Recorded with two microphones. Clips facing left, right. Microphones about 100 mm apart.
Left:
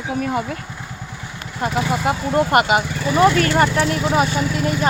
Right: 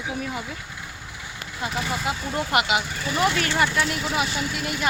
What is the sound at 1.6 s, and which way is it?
Speech, 50° left (ahead or behind).